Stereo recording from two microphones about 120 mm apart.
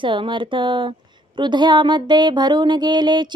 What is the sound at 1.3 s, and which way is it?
Music, 40° right (ahead or behind).